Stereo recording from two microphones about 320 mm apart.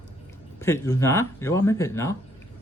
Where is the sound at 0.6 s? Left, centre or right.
Centre.